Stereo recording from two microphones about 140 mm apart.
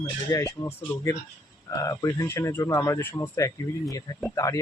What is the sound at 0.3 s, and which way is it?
Speech, 20° left (ahead or behind).